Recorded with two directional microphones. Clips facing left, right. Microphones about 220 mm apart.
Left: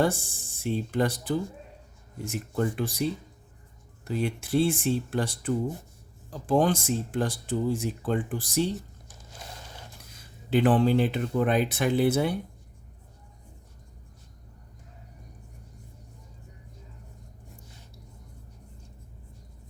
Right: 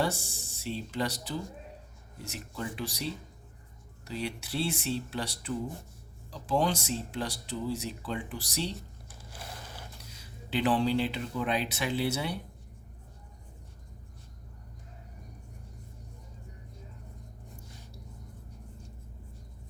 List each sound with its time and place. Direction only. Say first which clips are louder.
0.0 s speech: left 6 dB; 50° left (ahead or behind)
10.0 s speech: right 2 dB; 50° left (ahead or behind)